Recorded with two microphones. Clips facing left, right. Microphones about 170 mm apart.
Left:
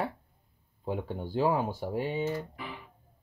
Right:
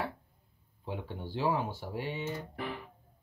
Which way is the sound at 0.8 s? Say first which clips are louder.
Left 5 dB; 45° left (ahead or behind).